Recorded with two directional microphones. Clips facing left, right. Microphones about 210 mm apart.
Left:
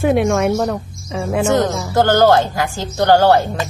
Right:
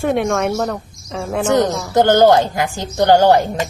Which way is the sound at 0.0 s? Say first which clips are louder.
Left 2 dB; 5° left (ahead or behind).